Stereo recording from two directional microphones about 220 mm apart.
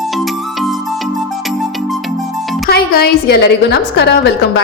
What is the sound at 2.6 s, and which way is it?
A woman's voice, 45° left (ahead or behind).